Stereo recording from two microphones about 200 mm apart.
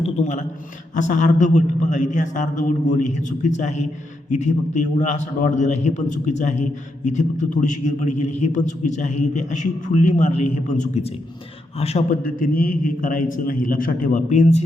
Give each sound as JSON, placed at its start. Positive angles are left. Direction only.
{"t": 0.0, "sound": "a man's voice", "side_deg": 35}
{"t": 12.2, "sound": "a man's voice", "side_deg": 45}